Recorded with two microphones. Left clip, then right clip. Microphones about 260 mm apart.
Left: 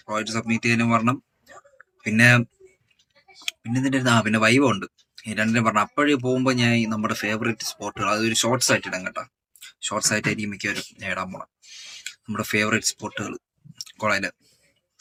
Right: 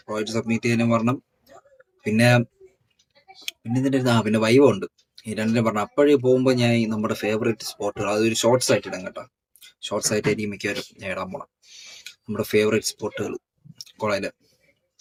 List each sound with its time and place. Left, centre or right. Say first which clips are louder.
0.1 s speech: even; centre
3.6 s speech: right 1 dB; centre